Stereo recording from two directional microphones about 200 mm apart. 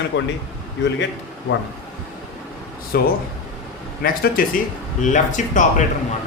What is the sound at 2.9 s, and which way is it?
Speech, 45° left (ahead or behind).